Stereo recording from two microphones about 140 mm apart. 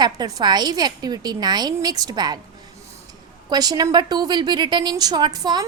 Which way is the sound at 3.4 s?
30° right (ahead or behind).